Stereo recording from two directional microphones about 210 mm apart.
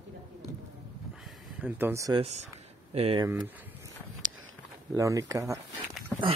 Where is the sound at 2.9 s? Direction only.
25° right (ahead or behind).